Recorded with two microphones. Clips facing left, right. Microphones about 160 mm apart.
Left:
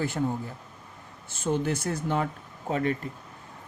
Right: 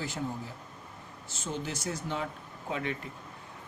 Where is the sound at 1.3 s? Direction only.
55° left (ahead or behind).